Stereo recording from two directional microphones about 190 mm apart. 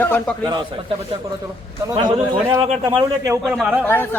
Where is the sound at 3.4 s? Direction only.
Centre (ahead or behind).